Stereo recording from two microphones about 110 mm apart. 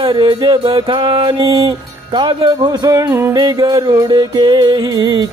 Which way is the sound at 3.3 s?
40° right (ahead or behind).